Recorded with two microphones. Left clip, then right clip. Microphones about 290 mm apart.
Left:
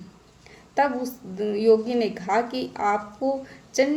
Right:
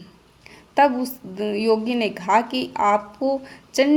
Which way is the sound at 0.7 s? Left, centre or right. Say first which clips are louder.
Right 5 dB; right.